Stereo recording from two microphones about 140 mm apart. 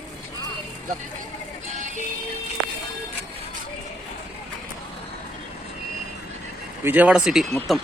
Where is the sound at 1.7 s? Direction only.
60° right (ahead or behind).